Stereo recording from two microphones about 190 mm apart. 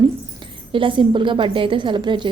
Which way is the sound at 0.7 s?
25° right (ahead or behind).